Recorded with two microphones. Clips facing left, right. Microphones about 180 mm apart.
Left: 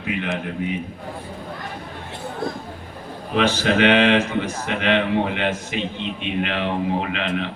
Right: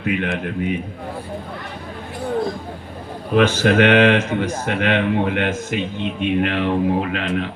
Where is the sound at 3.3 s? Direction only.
50° right (ahead or behind).